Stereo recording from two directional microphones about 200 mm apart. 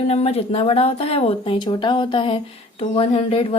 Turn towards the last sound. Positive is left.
turn(degrees=30)  # may be behind; listen again after turning